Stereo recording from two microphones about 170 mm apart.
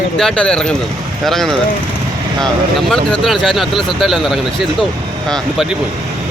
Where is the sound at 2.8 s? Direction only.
Centre (ahead or behind).